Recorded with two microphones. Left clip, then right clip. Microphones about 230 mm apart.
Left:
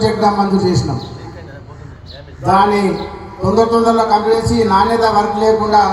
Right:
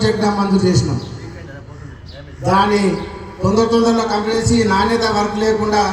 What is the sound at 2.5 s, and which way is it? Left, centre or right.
A man's voice, right.